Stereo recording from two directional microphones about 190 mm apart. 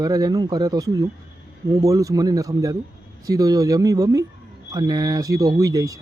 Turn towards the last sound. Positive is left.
turn(degrees=-15)  # may be behind; listen again after turning